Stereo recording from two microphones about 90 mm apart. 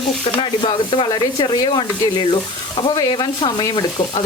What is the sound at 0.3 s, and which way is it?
Speech, 85° left.